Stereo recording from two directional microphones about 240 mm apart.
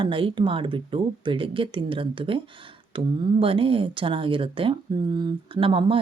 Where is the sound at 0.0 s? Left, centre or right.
Right.